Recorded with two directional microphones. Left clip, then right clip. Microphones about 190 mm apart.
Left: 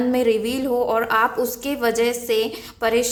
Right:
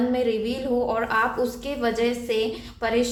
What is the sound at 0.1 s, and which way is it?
A woman's voice, 40° left (ahead or behind).